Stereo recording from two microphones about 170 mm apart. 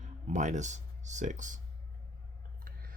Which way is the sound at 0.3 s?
45° right (ahead or behind).